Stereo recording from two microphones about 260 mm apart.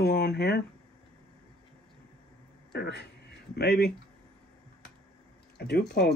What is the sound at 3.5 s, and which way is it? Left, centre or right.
Speech, left.